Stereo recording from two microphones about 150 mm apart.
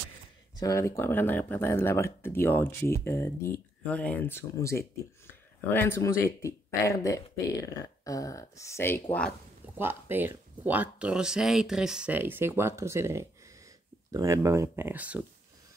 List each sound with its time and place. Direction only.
0.6 s speech: 20° left (ahead or behind)
9.8 s speech: 15° right (ahead or behind)